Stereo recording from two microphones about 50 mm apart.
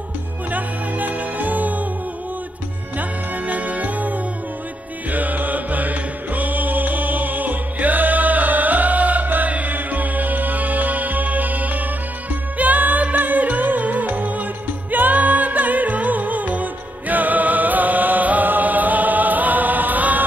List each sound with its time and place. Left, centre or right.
0.5 s music: right
3.0 s music: right